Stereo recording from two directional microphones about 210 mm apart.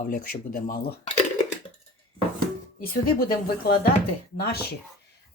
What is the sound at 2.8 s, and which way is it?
Speech, 45° left (ahead or behind).